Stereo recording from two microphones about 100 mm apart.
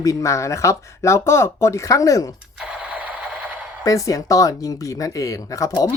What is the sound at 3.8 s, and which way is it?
Speech, 35° left (ahead or behind).